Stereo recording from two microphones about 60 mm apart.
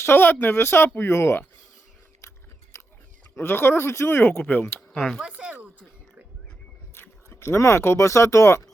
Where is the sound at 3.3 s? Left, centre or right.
Left.